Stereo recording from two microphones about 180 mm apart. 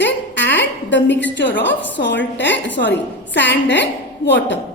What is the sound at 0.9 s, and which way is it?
A woman's voice, 80° left.